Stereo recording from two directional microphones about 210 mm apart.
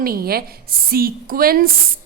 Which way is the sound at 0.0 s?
45° right (ahead or behind).